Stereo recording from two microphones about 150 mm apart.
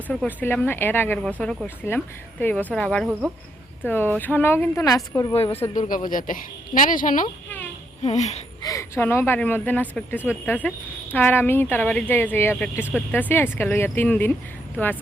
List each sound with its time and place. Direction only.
0.1 s speech: 5° left (ahead or behind)
3.1 s speech: 10° right (ahead or behind)
3.8 s speech: 15° left (ahead or behind)
5.7 s a woman's voice: 60° left (ahead or behind)
8.0 s speech: 50° left (ahead or behind)
8.6 s speech: 20° left (ahead or behind)